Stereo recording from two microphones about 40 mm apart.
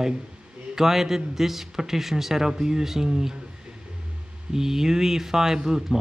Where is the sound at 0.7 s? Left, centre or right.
Centre.